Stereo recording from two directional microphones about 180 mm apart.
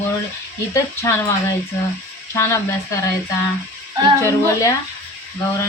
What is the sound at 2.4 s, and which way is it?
Speech, 15° left (ahead or behind).